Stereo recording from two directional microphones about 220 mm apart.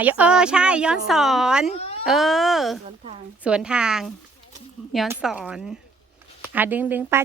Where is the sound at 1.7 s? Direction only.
30° left (ahead or behind).